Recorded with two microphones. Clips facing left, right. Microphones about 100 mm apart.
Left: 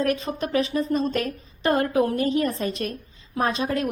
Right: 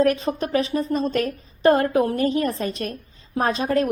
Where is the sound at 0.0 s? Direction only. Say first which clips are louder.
Right 4 dB; 35° right (ahead or behind).